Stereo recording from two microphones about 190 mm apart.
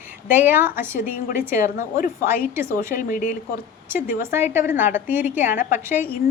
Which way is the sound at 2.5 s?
15° right (ahead or behind).